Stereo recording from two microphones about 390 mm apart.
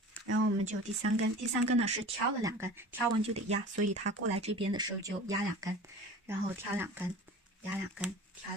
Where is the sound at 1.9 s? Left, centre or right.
Centre.